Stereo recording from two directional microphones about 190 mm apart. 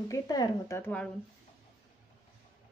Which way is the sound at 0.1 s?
20° left (ahead or behind).